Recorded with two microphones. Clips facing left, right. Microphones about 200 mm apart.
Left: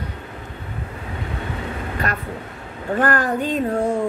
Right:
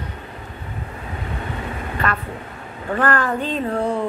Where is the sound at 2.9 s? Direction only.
40° left (ahead or behind).